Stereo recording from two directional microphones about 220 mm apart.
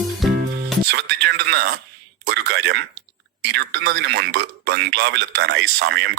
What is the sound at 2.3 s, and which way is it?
A man's voice, 50° right (ahead or behind).